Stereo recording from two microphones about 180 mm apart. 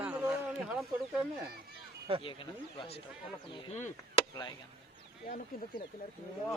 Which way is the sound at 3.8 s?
40° left (ahead or behind).